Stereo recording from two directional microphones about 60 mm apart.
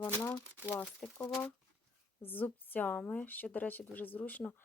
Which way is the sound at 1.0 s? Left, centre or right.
Centre.